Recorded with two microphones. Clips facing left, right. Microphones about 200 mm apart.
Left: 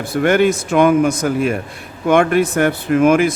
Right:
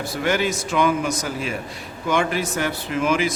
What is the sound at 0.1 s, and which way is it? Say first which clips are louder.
A man's voice: left 9 dB; 55° left (ahead or behind).